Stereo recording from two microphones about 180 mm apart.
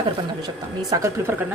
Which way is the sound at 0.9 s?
20° right (ahead or behind).